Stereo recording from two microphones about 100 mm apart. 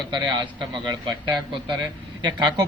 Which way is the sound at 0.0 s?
50° right (ahead or behind).